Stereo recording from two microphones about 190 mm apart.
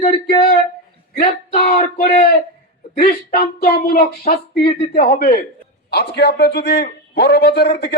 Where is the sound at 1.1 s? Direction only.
50° left (ahead or behind).